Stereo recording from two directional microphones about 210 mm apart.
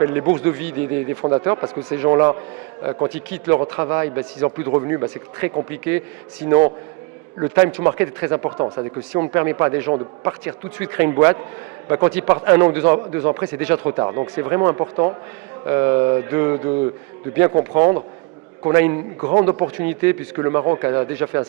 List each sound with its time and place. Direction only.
0.0 s a man's voice: 15° right (ahead or behind)
3.3 s a man's voice: 10° right (ahead or behind)
7.3 s a man's voice: 15° right (ahead or behind)